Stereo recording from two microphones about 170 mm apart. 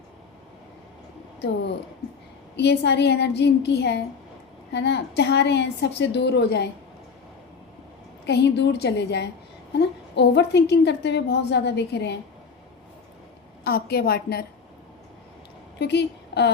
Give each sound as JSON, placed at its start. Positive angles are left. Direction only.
{"t": 2.6, "sound": "a woman's voice", "side_deg": 80}
{"t": 8.3, "sound": "a woman's voice", "side_deg": 85}
{"t": 13.7, "sound": "a woman's voice", "side_deg": 70}
{"t": 15.8, "sound": "a woman's voice", "side_deg": 80}